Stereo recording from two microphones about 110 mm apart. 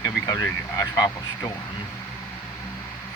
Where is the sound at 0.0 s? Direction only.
30° left (ahead or behind).